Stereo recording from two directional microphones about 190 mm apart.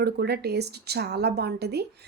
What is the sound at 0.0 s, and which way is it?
A woman's voice, 60° right (ahead or behind).